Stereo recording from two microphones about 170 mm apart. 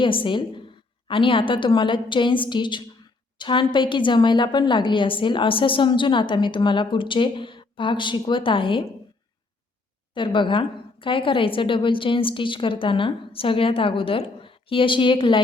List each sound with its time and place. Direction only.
0.0 s a woman's voice: 30° left (ahead or behind)
10.2 s a woman's voice: 30° left (ahead or behind)